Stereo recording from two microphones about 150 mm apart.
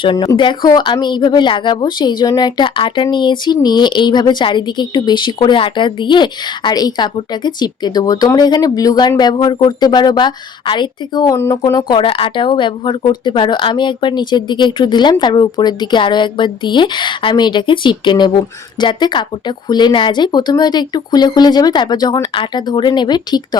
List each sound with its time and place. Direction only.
0.0 s speech: 30° left (ahead or behind)